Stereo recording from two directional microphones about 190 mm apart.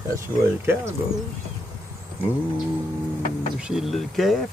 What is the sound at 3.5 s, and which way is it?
Speech, 5° right (ahead or behind).